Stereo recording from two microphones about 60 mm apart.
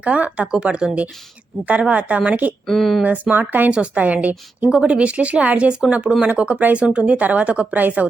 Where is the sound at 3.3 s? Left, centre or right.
Right.